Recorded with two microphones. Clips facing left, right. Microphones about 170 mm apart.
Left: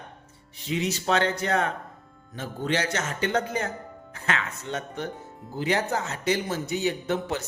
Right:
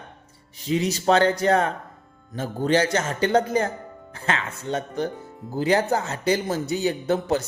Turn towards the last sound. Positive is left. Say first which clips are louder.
# right 5 dB
turn(degrees=-35)  # may be behind; listen again after turning